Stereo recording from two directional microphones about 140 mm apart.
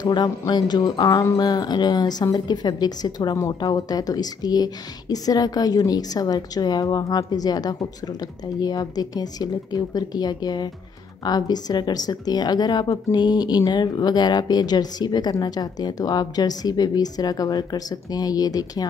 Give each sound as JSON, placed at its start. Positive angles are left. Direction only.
{"t": 0.0, "sound": "speech", "side_deg": 30}